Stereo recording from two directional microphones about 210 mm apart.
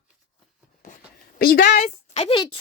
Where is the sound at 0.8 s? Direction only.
40° left (ahead or behind).